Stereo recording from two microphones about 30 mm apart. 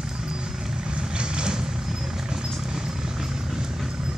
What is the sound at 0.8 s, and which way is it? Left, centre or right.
Vehicle, right.